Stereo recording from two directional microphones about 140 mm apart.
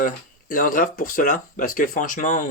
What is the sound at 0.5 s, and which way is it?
Speech, 75° left (ahead or behind).